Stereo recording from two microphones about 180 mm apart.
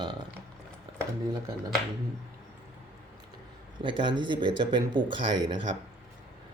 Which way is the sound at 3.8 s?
25° right (ahead or behind).